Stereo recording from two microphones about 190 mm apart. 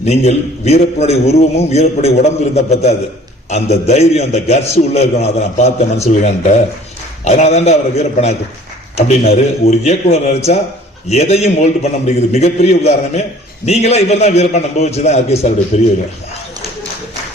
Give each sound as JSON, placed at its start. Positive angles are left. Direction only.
{"t": 0.0, "sound": "a man's voice", "side_deg": 35}